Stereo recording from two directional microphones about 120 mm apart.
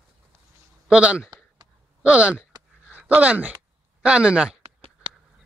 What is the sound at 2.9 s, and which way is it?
Speech, 10° right (ahead or behind).